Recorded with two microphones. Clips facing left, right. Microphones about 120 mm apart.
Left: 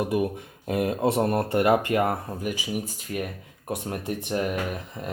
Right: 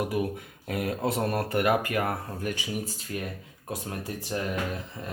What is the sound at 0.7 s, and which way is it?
Speech, 25° left (ahead or behind).